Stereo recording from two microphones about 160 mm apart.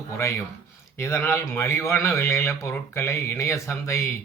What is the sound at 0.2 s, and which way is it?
Speech, 20° left (ahead or behind).